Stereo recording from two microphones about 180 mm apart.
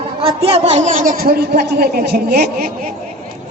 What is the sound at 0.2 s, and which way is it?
A woman's voice, 30° right (ahead or behind).